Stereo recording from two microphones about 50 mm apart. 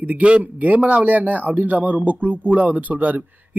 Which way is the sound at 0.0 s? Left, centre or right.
Right.